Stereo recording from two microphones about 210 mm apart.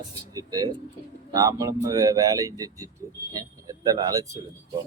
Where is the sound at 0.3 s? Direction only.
15° right (ahead or behind).